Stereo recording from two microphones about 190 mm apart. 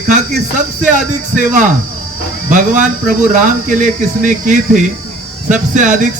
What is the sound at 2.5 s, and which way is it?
Speech, 40° right (ahead or behind).